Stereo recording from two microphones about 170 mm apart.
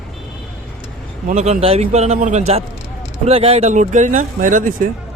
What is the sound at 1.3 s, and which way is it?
A man's voice, 40° right (ahead or behind).